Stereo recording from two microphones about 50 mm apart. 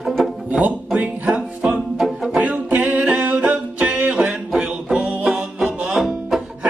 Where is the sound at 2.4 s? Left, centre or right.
Right; by 6.4 s centre.